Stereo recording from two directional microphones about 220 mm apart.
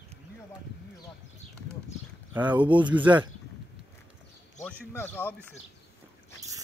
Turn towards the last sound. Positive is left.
turn(degrees=10)  # may be behind; listen again after turning